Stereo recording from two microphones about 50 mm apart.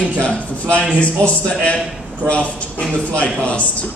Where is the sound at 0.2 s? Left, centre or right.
Left.